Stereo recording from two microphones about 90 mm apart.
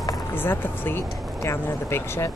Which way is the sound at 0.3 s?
25° left (ahead or behind).